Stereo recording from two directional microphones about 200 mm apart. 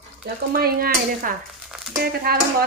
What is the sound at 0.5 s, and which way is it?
Speech, 50° right (ahead or behind).